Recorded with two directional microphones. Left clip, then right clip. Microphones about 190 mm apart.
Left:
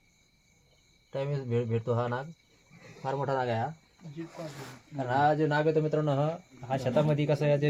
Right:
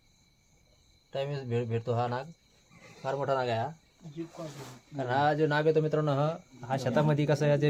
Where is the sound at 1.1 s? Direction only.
15° left (ahead or behind).